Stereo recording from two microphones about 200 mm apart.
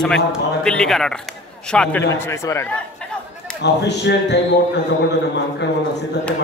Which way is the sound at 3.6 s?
60° left (ahead or behind).